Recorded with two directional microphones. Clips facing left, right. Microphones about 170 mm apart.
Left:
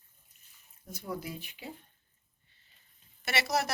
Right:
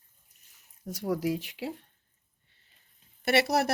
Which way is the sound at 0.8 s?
90° right.